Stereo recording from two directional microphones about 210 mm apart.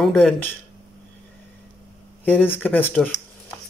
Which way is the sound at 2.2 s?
10° left (ahead or behind).